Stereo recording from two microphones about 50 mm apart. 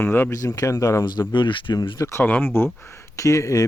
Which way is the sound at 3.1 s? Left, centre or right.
Left.